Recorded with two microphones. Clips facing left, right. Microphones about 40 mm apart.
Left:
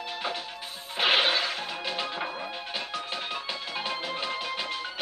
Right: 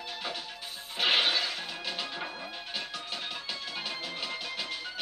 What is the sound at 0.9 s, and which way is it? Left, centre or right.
Music, centre.